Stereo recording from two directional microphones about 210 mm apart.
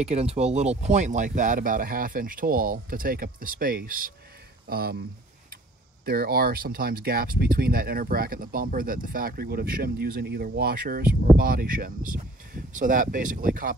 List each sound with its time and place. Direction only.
0.0 s speech: 30° right (ahead or behind); by 4.9 s 45° right (ahead or behind)
6.0 s speech: 45° right (ahead or behind)